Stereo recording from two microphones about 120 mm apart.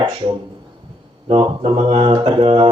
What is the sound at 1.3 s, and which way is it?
Speech, 50° right (ahead or behind).